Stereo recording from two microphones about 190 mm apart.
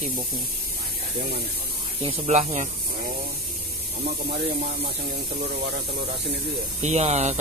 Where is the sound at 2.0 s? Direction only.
35° right (ahead or behind).